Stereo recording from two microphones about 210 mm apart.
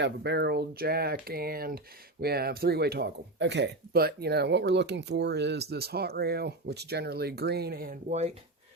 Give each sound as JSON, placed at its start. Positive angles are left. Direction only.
{"t": 0.0, "sound": "speech", "side_deg": -55}